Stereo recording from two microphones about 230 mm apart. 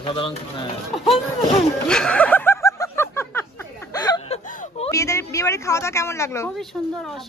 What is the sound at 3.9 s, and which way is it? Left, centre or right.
Chuckle, centre.